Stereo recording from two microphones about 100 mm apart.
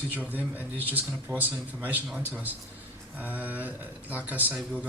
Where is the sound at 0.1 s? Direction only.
15° right (ahead or behind).